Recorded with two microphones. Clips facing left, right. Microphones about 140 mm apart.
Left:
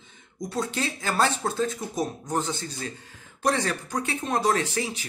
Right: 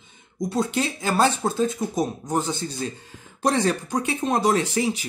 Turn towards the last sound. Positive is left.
turn(degrees=-15)  # may be behind; listen again after turning